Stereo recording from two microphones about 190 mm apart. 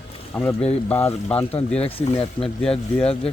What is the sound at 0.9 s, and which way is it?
Speech, 10° left (ahead or behind).